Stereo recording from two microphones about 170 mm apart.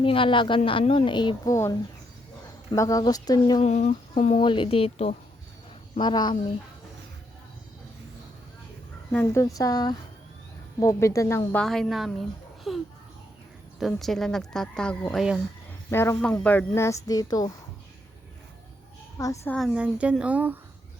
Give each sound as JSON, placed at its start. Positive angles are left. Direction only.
{"t": 0.0, "sound": "a woman's voice", "side_deg": 30}
{"t": 2.7, "sound": "a woman's voice", "side_deg": 20}
{"t": 3.6, "sound": "speech", "side_deg": 40}
{"t": 4.4, "sound": "a woman's voice", "side_deg": 30}
{"t": 9.1, "sound": "a woman's voice", "side_deg": 15}
{"t": 11.6, "sound": "speech", "side_deg": 0}
{"t": 15.9, "sound": "speech", "side_deg": 15}
{"t": 19.2, "sound": "speech", "side_deg": 20}
{"t": 19.5, "sound": "speech", "side_deg": -5}